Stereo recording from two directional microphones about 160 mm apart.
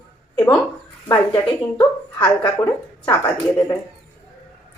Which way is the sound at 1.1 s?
20° left (ahead or behind).